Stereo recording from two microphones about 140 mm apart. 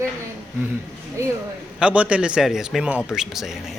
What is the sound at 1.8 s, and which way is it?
A man's voice, 10° right (ahead or behind).